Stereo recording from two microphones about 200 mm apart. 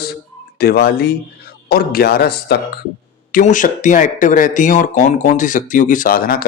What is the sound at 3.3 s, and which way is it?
Speech, 40° left (ahead or behind).